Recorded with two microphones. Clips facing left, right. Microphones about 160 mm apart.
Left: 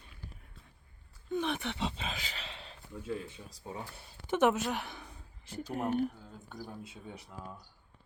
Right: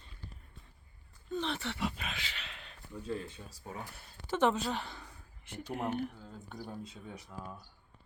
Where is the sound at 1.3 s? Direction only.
15° left (ahead or behind).